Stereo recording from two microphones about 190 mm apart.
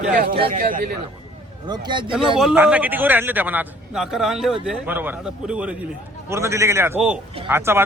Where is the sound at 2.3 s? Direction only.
5° right (ahead or behind).